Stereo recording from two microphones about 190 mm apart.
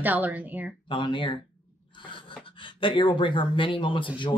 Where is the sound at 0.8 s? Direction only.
25° left (ahead or behind).